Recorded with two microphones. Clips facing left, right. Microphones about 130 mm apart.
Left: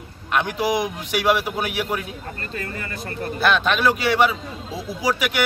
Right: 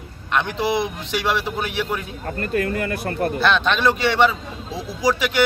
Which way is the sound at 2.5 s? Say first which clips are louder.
Right 11 dB; 55° right (ahead or behind).